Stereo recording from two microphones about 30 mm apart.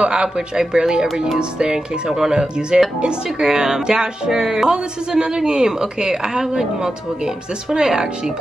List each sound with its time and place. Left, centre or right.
0.0 s a woman's voice: right
7.7 s a woman's voice: right